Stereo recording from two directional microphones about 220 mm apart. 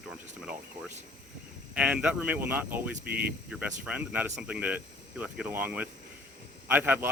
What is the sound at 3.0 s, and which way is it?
Speech, 45° right (ahead or behind).